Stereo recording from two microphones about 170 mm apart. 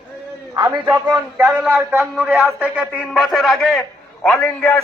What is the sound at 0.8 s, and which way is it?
A man's voice, 5° right (ahead or behind).